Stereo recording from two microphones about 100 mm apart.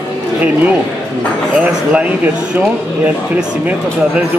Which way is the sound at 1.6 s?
15° right (ahead or behind).